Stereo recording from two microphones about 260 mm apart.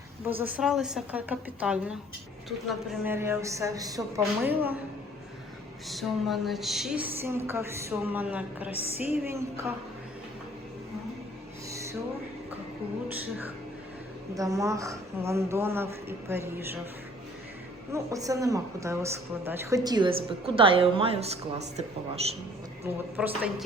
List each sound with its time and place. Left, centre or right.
0.3 s a woman's voice: centre
5.9 s a woman's voice: centre
8.7 s music: left
9.2 s speech: centre
11.7 s a sound: centre
13.1 s music: centre
14.3 s speech: centre
17.9 s speech: centre
23.1 s a woman's voice: centre